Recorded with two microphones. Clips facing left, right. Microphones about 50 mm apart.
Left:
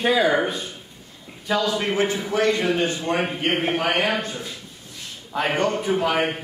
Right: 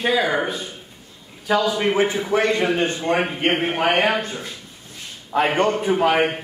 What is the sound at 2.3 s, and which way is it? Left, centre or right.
Speech, right.